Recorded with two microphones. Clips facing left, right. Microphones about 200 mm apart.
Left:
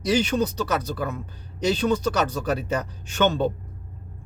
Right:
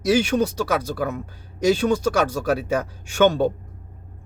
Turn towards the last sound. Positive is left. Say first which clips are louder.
# right 4 dB
turn(degrees=-10)  # may be behind; listen again after turning